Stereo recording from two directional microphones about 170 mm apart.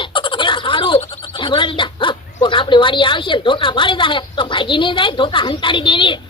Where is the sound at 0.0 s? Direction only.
30° left (ahead or behind).